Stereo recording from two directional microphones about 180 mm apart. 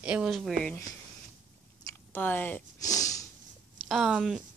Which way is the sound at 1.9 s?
10° left (ahead or behind).